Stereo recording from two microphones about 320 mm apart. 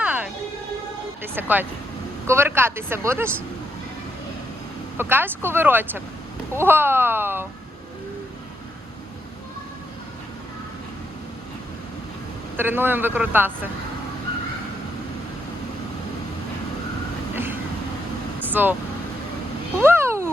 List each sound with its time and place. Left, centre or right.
0.0 s music: centre
1.2 s speech: centre
4.9 s speech: centre
12.5 s speech: centre
17.3 s vehicle: centre
19.8 s a sound: centre